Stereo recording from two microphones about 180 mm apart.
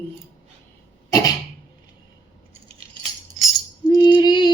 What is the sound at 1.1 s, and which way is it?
Cough, 20° left (ahead or behind).